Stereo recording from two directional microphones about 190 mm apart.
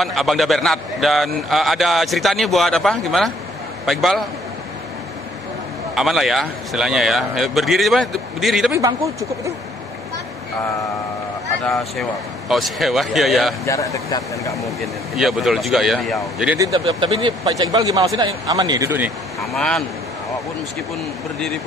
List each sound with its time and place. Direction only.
0.0 s a man's voice: centre (ahead or behind)
5.9 s a man's voice: centre (ahead or behind)
8.7 s a man's voice: 15° right (ahead or behind)
11.6 s a man's voice: centre (ahead or behind)
13.7 s speech: 15° left (ahead or behind)
14.5 s a man's voice: centre (ahead or behind)
16.7 s speech: 30° right (ahead or behind); by 19.8 s centre (ahead or behind)